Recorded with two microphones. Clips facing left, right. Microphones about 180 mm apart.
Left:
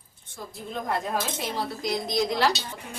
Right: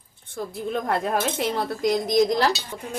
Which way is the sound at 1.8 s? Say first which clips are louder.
Right 8 dB; 45° right (ahead or behind).